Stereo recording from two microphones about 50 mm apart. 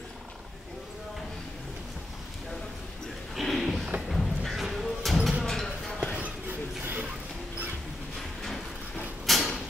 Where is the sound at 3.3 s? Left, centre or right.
Centre.